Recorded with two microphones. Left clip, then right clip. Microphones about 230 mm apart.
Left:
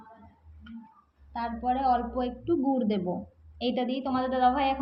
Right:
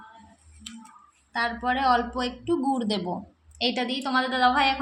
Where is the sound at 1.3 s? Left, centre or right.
Centre.